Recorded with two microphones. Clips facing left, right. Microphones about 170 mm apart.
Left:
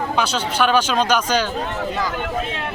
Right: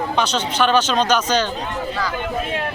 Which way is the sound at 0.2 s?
10° left (ahead or behind).